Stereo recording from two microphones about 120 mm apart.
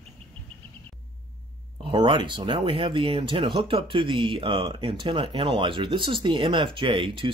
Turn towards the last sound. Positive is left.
turn(degrees=-45)  # may be behind; listen again after turning